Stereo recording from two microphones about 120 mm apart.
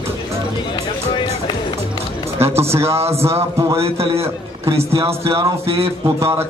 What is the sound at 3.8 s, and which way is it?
Speech, 55° right (ahead or behind).